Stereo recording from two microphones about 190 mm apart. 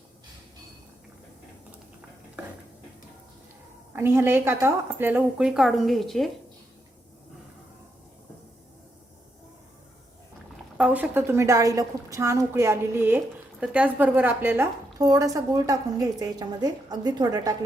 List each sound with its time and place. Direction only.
3.9 s a woman's voice: 10° right (ahead or behind)
10.8 s a woman's voice: 5° right (ahead or behind); by 17.5 s 20° right (ahead or behind)